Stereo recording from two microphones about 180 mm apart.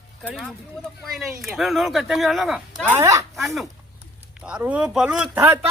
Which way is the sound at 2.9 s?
15° right (ahead or behind).